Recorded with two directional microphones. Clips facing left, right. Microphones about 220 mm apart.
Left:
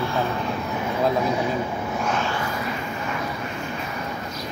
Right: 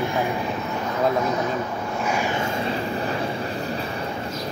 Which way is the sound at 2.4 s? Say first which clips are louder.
Right 3 dB; 25° right (ahead or behind).